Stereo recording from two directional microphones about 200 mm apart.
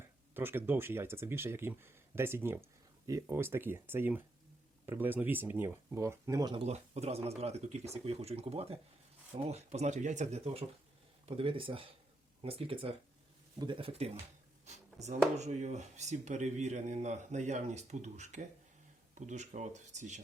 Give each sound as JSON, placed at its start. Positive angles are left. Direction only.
{"t": 0.3, "sound": "speech", "side_deg": -10}
{"t": 15.4, "sound": "speech", "side_deg": -35}